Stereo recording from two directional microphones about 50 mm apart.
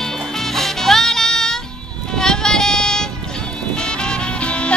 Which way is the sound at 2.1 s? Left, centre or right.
Centre.